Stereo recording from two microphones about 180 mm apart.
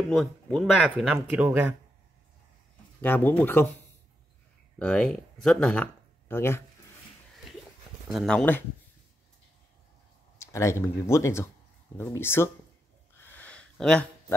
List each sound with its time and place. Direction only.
0.1 s speech: centre (ahead or behind)
3.0 s speech: 10° left (ahead or behind)
4.7 s speech: 5° left (ahead or behind)
8.1 s speech: centre (ahead or behind)
10.4 s speech: 15° left (ahead or behind)
13.2 s a sound: 10° left (ahead or behind)